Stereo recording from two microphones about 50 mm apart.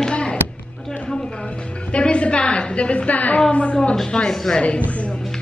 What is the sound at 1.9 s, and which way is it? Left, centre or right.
A woman's voice, left.